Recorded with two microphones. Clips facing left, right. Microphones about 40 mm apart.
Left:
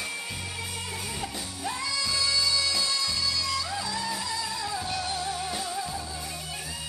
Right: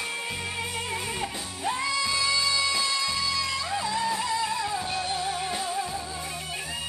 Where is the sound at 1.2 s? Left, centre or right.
Right.